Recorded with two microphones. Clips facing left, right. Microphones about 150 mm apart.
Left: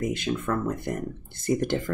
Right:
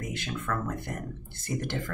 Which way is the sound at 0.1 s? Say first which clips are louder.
Left 6 dB; 20° left (ahead or behind).